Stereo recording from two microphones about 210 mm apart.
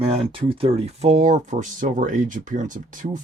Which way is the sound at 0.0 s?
25° right (ahead or behind).